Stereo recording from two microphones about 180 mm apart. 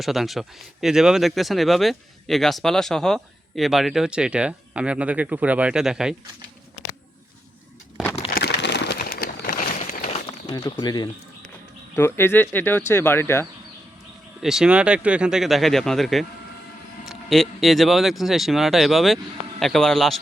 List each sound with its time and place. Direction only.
0.0 s speech: centre (ahead or behind)
8.4 s crumpling: 70° left (ahead or behind); by 10.2 s 45° left (ahead or behind)
10.5 s speech: 25° left (ahead or behind)
14.4 s speech: 5° right (ahead or behind)